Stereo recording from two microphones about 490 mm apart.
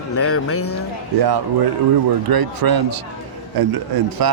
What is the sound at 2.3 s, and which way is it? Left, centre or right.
A man's voice, right.